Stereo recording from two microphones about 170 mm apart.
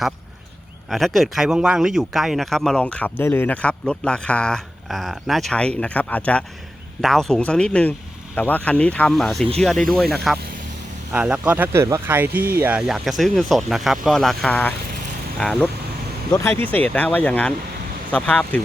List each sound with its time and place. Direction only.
0.9 s speech: centre (ahead or behind)